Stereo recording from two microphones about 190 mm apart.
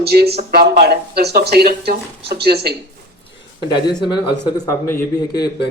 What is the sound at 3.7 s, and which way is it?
A man's voice, 25° left (ahead or behind).